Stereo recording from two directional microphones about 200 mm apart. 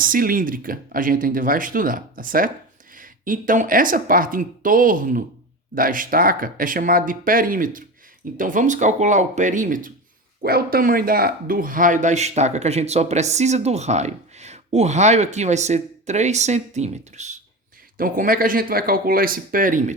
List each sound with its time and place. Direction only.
0.0 s speech: 45° right (ahead or behind)